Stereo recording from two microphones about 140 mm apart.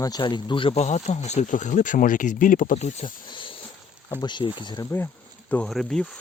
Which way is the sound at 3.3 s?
35° left (ahead or behind).